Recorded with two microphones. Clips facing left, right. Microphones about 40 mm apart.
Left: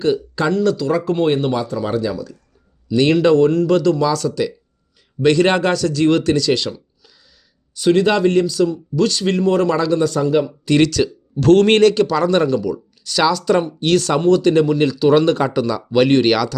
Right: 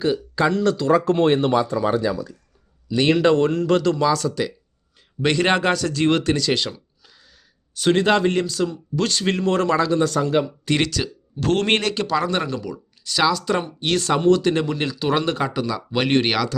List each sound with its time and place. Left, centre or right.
0.0 s speech: centre
0.5 s speech: right
1.8 s speech: centre
3.2 s speech: right
7.8 s speech: right
9.7 s speech: right
10.2 s speech: right
10.8 s speech: centre
15.2 s speech: centre